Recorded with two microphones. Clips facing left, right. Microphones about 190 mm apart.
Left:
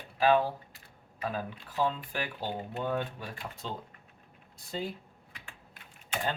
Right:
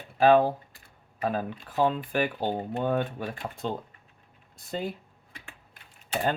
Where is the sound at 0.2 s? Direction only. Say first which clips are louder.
Right 6 dB; 50° right (ahead or behind).